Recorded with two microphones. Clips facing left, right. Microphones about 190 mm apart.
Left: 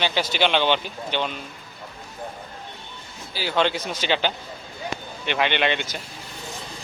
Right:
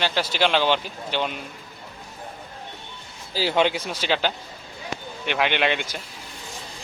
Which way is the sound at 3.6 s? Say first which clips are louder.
Left 1 dB; 10° right (ahead or behind).